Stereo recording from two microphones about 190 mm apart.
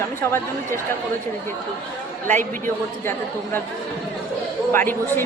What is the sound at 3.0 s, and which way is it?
Speech, 10° left (ahead or behind).